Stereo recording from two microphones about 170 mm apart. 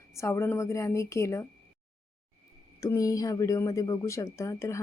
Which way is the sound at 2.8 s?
20° left (ahead or behind).